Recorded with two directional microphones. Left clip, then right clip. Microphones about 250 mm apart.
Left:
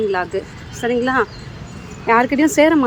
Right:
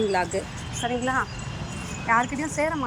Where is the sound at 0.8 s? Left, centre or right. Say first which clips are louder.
Left 8 dB; left.